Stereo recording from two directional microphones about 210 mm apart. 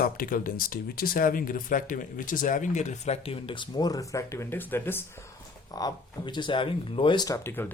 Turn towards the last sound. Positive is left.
turn(degrees=10)  # may be behind; listen again after turning